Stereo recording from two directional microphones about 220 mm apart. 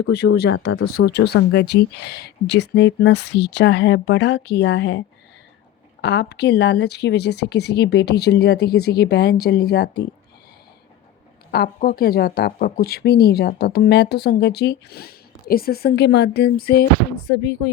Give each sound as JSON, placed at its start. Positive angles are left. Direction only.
{"t": 0.0, "sound": "a woman's voice", "side_deg": 50}
{"t": 0.5, "sound": "speech", "side_deg": 65}
{"t": 0.9, "sound": "a woman's voice", "side_deg": 45}
{"t": 11.5, "sound": "a woman's voice", "side_deg": 45}